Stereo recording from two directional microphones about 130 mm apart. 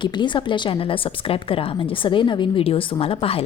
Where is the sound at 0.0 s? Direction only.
35° left (ahead or behind).